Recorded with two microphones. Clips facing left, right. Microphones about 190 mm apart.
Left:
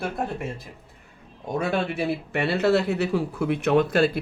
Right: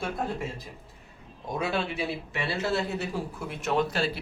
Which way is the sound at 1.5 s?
55° left (ahead or behind).